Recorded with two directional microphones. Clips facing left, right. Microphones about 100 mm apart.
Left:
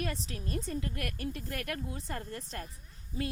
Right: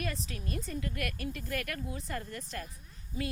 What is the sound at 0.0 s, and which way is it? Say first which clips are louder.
A woman's voice: left 1 dB; 30° left (ahead or behind).